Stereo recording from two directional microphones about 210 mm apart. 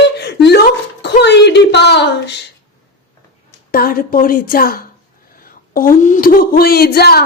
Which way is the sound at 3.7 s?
45° left (ahead or behind).